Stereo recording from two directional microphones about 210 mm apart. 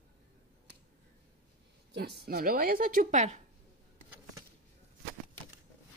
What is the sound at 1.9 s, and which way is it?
A woman's voice, 55° right (ahead or behind).